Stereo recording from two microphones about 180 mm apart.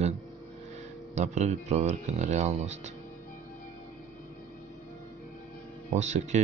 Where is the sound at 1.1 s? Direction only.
40° right (ahead or behind).